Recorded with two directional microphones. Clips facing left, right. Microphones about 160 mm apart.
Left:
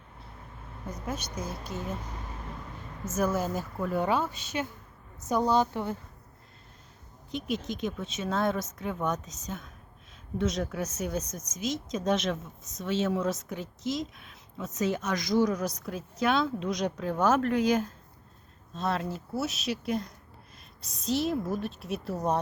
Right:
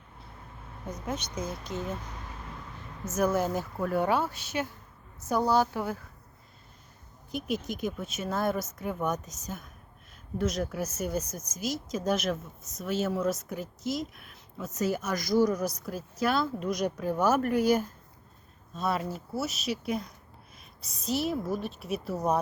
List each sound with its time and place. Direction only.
1.1 s speech: 5° left (ahead or behind)
3.1 s speech: 15° right (ahead or behind)
5.4 s a woman's voice: 20° left (ahead or behind)
5.7 s speech: 5° right (ahead or behind)
7.3 s speech: 10° right (ahead or behind)
14.8 s speech: 5° right (ahead or behind)